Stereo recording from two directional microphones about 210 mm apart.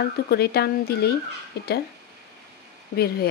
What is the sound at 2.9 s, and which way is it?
Speech, 50° left (ahead or behind).